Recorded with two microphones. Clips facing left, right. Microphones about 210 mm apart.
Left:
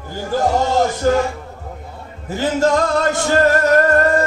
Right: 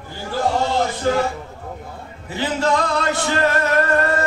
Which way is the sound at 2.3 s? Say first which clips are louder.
Left 4 dB; 45° left (ahead or behind).